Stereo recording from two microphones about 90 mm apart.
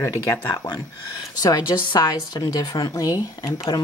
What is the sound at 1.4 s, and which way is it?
Speech, 55° left (ahead or behind).